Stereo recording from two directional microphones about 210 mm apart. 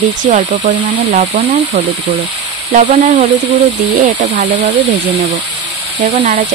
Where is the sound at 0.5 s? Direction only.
35° right (ahead or behind).